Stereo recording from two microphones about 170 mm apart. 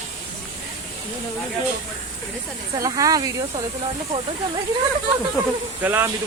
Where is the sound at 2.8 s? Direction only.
20° right (ahead or behind).